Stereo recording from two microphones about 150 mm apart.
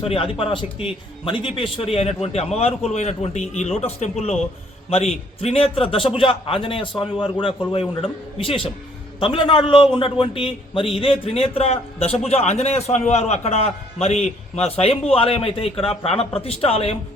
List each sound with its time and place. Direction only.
0.0 s a man's voice: 40° left (ahead or behind)